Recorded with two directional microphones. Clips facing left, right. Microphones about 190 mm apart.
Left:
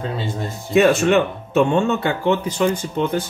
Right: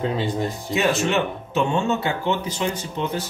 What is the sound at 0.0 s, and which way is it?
Speech, 15° right (ahead or behind).